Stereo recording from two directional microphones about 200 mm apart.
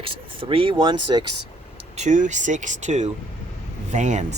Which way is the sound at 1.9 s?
35° right (ahead or behind).